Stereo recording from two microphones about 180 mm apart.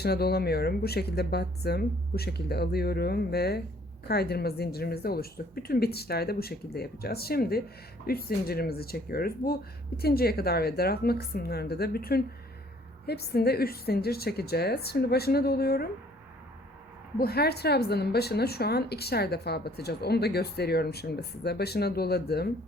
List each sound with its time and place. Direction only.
0.0 s a woman's voice: 60° left (ahead or behind)
17.2 s a woman's voice: 60° left (ahead or behind)